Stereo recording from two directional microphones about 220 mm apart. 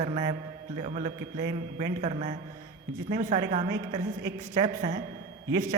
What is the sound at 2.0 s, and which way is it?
Speech, 30° right (ahead or behind).